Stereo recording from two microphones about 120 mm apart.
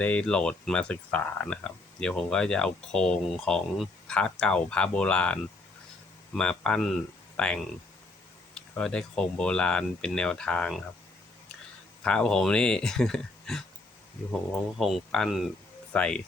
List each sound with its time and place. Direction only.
0.0 s speech: 10° left (ahead or behind)
8.8 s speech: 5° left (ahead or behind)
12.0 s speech: 10° left (ahead or behind)